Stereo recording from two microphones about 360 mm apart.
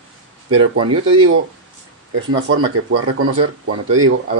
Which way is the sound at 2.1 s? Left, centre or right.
Right.